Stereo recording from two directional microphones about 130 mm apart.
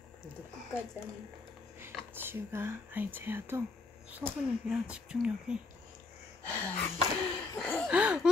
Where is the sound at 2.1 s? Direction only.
15° right (ahead or behind).